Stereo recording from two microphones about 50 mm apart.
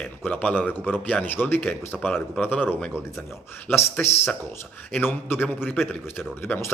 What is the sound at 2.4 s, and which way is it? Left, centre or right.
Speech, left.